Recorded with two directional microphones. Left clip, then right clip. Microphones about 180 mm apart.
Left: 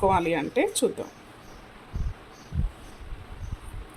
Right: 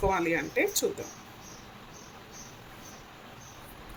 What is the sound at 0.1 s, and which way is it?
Speech, 40° left (ahead or behind).